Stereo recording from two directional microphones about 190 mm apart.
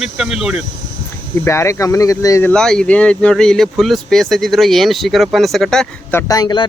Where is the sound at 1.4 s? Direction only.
15° left (ahead or behind).